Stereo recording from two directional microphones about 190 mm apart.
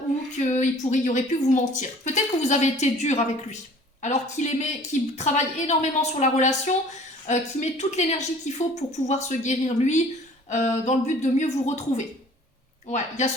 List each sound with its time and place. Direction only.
0.3 s a woman's voice: 40° left (ahead or behind)